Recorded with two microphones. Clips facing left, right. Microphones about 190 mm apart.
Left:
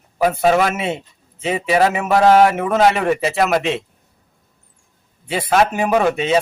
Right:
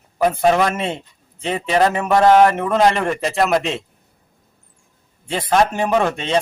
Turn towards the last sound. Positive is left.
turn(degrees=5)  # may be behind; listen again after turning